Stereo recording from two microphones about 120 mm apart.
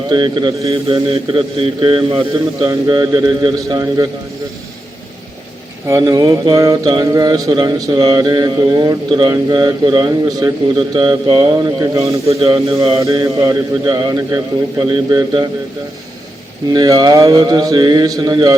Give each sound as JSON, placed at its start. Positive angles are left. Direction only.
{"t": 0.1, "sound": "mantra", "side_deg": -40}
{"t": 0.7, "sound": "a man's voice", "side_deg": -50}
{"t": 2.6, "sound": "mantra", "side_deg": -30}
{"t": 5.9, "sound": "mantra", "side_deg": -30}
{"t": 12.4, "sound": "a man's voice", "side_deg": -50}
{"t": 13.2, "sound": "mantra", "side_deg": -30}
{"t": 14.8, "sound": "mantra", "side_deg": -40}
{"t": 16.7, "sound": "mantra", "side_deg": -35}